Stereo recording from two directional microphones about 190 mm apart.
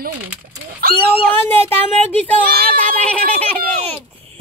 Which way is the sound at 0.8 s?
50° right (ahead or behind).